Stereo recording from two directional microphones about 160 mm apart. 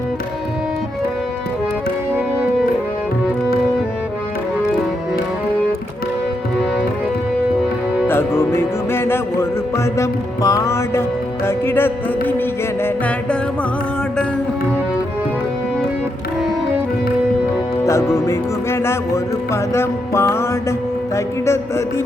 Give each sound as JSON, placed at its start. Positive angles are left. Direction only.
{"t": 8.0, "sound": "music", "side_deg": 15}
{"t": 17.8, "sound": "music", "side_deg": 20}